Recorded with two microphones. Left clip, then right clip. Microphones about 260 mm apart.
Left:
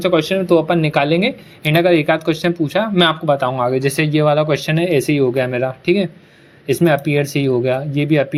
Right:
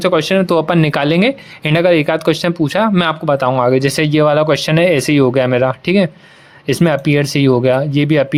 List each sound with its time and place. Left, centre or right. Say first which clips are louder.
0.0 s speech: right 3 dB; right